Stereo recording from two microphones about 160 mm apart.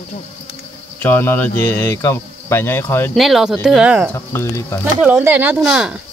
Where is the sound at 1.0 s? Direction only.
15° left (ahead or behind).